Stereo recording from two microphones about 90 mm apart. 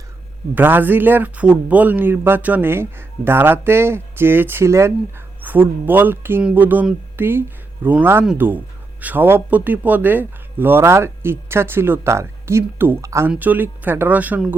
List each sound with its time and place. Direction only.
0.5 s speech: 20° right (ahead or behind)
5.4 s speech: 20° right (ahead or behind); by 13.2 s 35° right (ahead or behind)
13.4 s speech: 20° right (ahead or behind)